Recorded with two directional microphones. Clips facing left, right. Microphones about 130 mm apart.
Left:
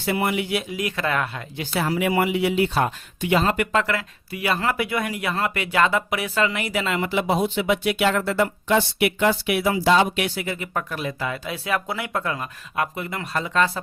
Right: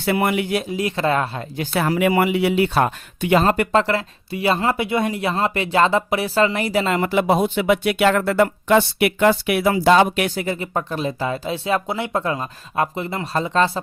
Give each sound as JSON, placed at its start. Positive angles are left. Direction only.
{"t": 0.0, "sound": "speech", "side_deg": -60}
{"t": 0.7, "sound": "speech", "side_deg": -30}
{"t": 1.5, "sound": "speech", "side_deg": -55}